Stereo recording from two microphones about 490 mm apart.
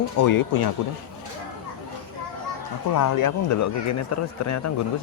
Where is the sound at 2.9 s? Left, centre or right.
Left.